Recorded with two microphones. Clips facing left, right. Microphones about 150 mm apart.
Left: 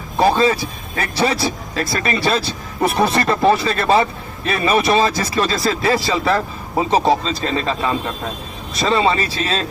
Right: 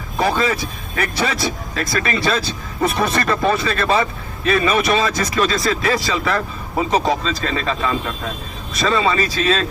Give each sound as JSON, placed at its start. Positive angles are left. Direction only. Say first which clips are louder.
{"t": 0.2, "sound": "speech", "louder": "left 4 dB", "side_deg": 30}